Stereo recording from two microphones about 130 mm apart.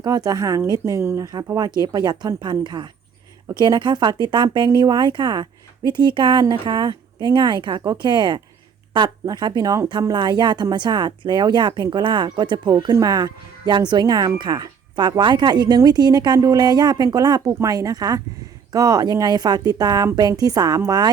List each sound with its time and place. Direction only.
0.0 s speech: 30° right (ahead or behind)